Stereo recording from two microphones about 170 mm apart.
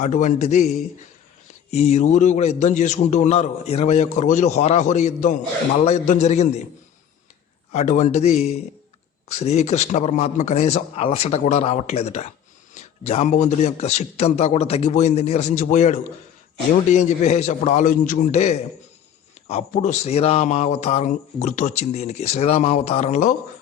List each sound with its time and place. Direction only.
0.0 s a man's voice: 45° left (ahead or behind)
7.7 s speech: 45° left (ahead or behind)